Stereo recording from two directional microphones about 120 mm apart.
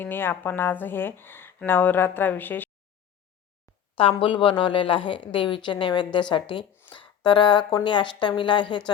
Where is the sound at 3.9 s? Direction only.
50° left (ahead or behind).